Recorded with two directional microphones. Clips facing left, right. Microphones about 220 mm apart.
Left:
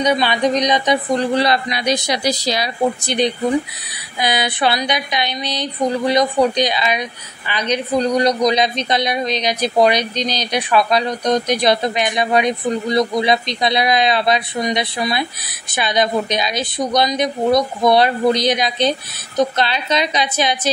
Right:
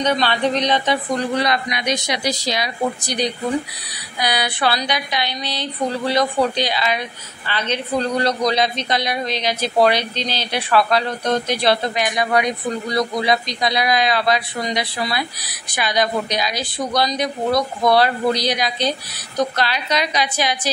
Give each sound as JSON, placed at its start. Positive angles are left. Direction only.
{"t": 0.0, "sound": "speech", "side_deg": 10}
{"t": 1.1, "sound": "speech", "side_deg": 30}